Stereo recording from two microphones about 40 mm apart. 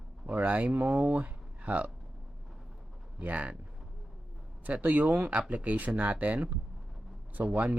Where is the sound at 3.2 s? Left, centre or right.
Right.